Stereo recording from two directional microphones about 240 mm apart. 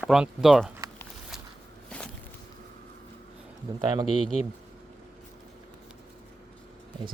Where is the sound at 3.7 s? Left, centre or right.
Centre.